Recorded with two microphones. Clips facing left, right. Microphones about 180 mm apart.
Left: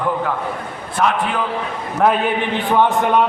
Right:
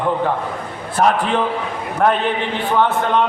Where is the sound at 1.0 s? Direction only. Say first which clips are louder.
Right 3 dB; 40° right (ahead or behind).